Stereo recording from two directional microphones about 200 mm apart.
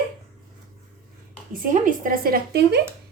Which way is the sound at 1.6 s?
45° right (ahead or behind).